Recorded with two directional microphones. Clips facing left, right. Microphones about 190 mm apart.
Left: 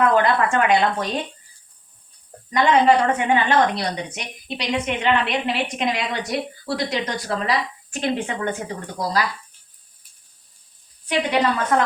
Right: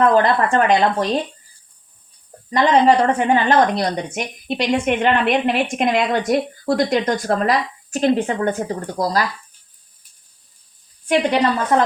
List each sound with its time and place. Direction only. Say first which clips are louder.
0.0 s speech: right 3 dB; 35° right (ahead or behind)
2.5 s a woman's voice: right 2 dB; 40° right (ahead or behind)